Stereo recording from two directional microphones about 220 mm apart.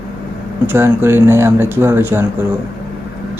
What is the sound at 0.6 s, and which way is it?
Speech, 10° right (ahead or behind).